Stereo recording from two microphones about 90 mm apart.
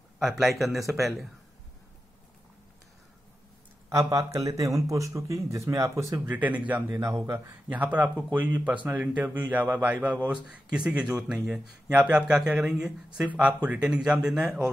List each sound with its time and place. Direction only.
0.2 s speech: 5° right (ahead or behind)
3.9 s speech: 35° right (ahead or behind)
7.7 s speech: 15° right (ahead or behind)